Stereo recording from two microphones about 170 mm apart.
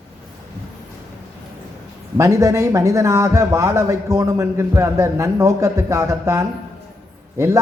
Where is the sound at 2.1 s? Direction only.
20° right (ahead or behind).